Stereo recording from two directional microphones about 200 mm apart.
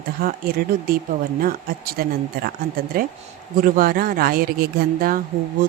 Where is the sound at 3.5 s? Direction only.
45° right (ahead or behind).